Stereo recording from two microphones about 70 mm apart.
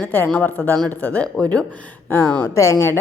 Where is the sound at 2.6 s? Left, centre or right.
Left.